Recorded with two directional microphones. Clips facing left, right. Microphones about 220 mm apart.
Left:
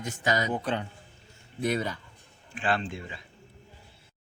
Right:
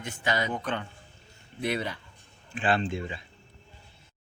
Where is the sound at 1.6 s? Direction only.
45° left (ahead or behind).